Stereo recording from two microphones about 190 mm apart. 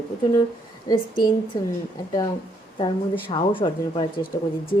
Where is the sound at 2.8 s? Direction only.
25° left (ahead or behind).